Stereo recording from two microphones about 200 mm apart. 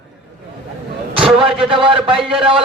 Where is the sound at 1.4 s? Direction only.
25° right (ahead or behind).